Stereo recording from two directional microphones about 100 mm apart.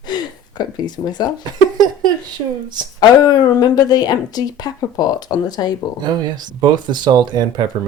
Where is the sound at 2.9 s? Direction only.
40° left (ahead or behind).